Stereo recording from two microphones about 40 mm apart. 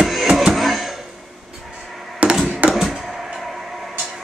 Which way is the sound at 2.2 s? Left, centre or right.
Right.